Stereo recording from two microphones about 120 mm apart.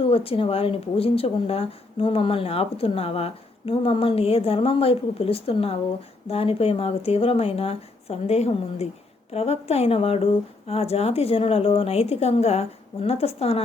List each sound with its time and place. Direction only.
0.0 s a woman's voice: 50° left (ahead or behind)